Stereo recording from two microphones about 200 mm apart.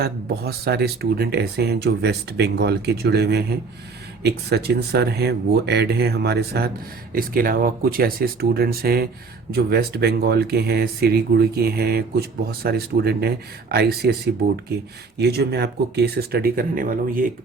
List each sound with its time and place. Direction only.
0.0 s speech: 50° right (ahead or behind)